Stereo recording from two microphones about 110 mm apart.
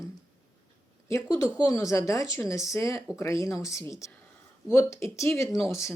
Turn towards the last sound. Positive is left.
turn(degrees=25)  # may be behind; listen again after turning